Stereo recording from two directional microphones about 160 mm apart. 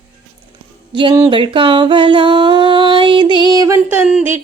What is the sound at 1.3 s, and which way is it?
Music, 30° right (ahead or behind).